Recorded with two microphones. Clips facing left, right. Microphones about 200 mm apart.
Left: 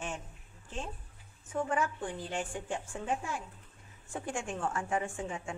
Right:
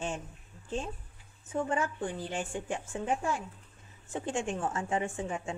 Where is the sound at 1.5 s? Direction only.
25° right (ahead or behind).